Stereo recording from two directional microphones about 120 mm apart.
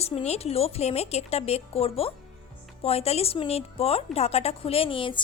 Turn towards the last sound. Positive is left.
turn(degrees=45)  # may be behind; listen again after turning